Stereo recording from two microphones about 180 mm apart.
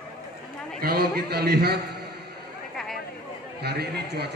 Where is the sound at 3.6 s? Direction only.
65° right (ahead or behind).